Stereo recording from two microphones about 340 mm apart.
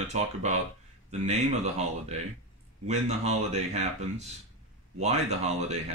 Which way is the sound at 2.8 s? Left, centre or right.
Centre.